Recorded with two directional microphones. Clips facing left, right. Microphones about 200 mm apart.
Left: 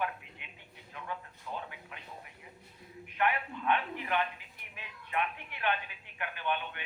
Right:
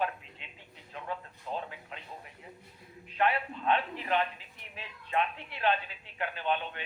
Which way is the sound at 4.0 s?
25° right (ahead or behind).